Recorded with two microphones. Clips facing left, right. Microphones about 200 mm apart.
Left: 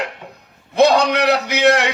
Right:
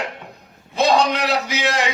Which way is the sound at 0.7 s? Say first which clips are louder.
Left 4 dB; 65° left (ahead or behind).